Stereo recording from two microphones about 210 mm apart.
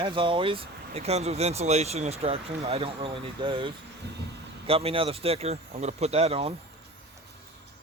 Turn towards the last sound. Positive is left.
turn(degrees=-30)  # may be behind; listen again after turning